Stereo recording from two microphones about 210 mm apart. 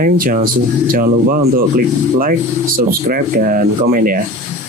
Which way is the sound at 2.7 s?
40° right (ahead or behind).